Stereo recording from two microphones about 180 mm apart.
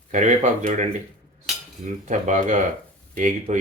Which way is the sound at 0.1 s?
40° right (ahead or behind).